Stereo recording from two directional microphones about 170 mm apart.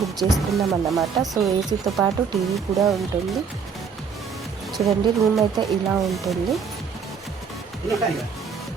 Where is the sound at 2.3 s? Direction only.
20° right (ahead or behind).